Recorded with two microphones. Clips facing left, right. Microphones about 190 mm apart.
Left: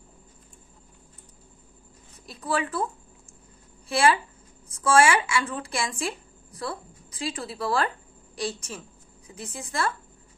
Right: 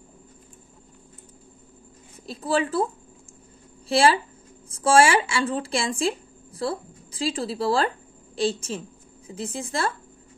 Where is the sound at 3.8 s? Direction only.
30° right (ahead or behind).